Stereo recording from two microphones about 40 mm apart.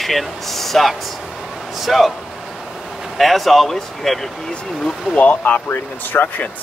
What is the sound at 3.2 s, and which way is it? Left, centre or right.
Speech, centre.